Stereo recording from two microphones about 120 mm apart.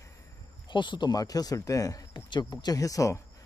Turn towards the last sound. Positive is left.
turn(degrees=25)  # may be behind; listen again after turning